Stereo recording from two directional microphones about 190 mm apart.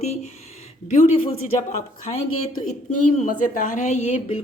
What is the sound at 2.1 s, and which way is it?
Speech, 30° left (ahead or behind).